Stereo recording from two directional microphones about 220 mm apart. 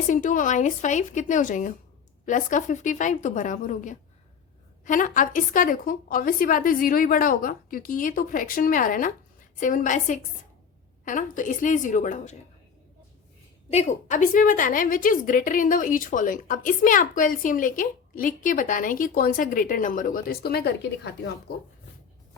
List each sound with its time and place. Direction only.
0.1 s a woman's voice: 35° left (ahead or behind)
13.7 s a woman's voice: 30° left (ahead or behind)